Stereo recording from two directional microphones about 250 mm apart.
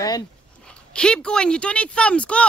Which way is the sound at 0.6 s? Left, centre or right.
Centre.